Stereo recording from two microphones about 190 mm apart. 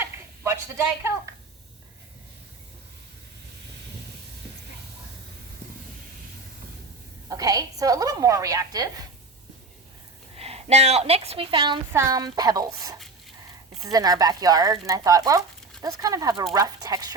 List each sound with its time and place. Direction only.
0.0 s a sound: 15° right (ahead or behind)
7.3 s a woman's voice: 20° right (ahead or behind)
10.3 s a woman's voice: 30° right (ahead or behind)